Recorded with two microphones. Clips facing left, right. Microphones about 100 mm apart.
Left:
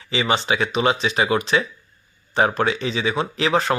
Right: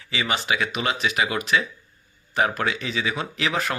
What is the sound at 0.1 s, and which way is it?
Speech, 30° left (ahead or behind).